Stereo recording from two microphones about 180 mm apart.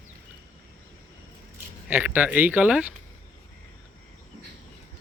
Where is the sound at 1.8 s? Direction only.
10° right (ahead or behind).